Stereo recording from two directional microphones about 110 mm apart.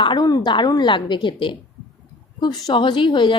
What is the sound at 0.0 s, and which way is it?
A woman's voice, 45° left (ahead or behind).